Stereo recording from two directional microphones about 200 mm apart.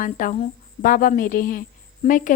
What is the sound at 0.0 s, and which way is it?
A woman's voice, 40° left (ahead or behind).